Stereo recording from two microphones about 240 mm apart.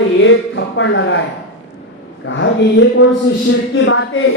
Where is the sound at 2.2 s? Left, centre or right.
Left.